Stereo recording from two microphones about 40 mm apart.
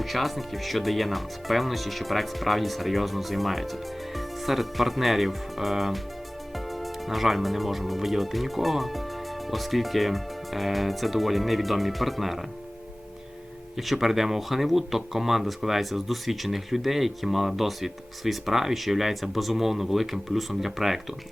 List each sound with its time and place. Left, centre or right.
0.0 s speech: centre
13.7 s speech: centre